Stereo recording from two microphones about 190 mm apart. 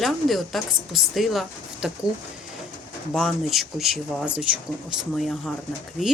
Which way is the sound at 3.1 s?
Centre (ahead or behind).